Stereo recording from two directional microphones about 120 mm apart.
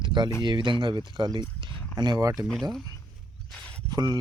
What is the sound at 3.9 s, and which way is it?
Speech, 35° right (ahead or behind).